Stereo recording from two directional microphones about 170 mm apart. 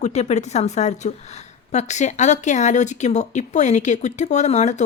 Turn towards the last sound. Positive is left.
turn(degrees=45)  # may be behind; listen again after turning